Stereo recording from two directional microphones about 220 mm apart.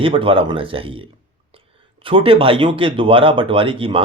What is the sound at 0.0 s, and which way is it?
A man's voice, 25° right (ahead or behind).